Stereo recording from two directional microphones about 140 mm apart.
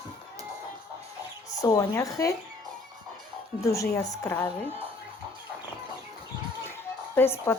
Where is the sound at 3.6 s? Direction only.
25° left (ahead or behind).